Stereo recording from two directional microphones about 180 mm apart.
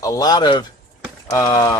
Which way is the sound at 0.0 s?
20° left (ahead or behind).